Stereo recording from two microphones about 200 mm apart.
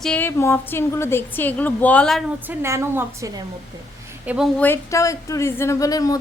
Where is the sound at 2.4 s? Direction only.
15° right (ahead or behind).